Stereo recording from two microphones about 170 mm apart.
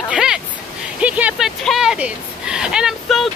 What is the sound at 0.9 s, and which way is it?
Vehicle, 10° right (ahead or behind).